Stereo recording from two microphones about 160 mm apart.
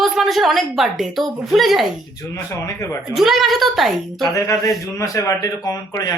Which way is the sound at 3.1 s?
Centre (ahead or behind).